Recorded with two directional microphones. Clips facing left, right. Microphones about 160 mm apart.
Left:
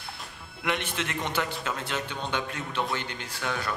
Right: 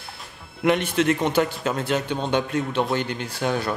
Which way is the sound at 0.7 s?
45° right (ahead or behind).